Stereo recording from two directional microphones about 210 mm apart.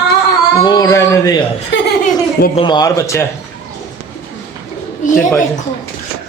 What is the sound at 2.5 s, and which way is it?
Speech, 20° left (ahead or behind).